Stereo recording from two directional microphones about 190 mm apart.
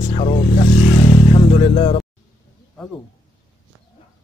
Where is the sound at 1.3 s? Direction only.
30° left (ahead or behind).